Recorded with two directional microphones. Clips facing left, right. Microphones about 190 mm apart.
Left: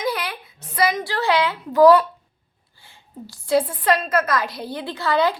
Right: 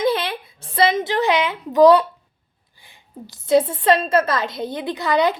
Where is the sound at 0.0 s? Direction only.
25° right (ahead or behind).